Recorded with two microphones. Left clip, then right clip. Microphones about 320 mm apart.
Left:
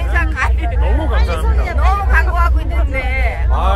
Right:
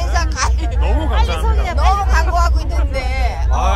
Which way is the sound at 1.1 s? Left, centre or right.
Centre.